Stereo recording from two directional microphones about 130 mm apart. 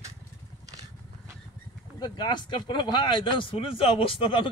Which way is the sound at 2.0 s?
35° left (ahead or behind).